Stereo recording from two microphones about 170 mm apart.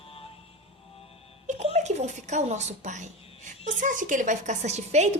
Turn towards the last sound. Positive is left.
turn(degrees=-40)  # may be behind; listen again after turning